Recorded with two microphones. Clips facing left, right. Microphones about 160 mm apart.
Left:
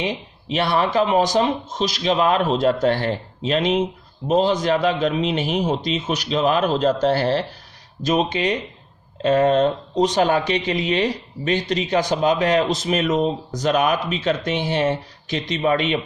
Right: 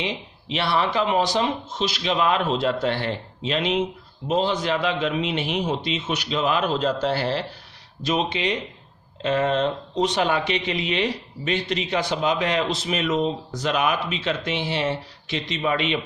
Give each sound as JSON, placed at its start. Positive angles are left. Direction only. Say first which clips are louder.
{"t": 0.0, "sound": "speech", "louder": "left 4 dB", "side_deg": 45}